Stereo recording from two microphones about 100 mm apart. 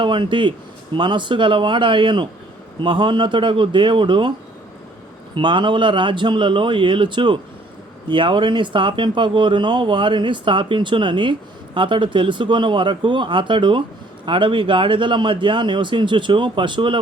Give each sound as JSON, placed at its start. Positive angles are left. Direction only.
{"t": 0.0, "sound": "speech", "side_deg": -55}
{"t": 5.3, "sound": "speech", "side_deg": -55}